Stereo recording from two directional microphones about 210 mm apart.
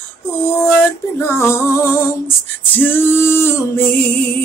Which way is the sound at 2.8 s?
10° left (ahead or behind).